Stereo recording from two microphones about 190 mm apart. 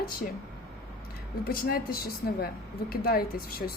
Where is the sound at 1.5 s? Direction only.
50° left (ahead or behind).